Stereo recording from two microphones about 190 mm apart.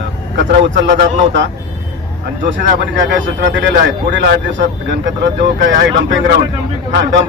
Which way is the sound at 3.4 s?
65° right (ahead or behind).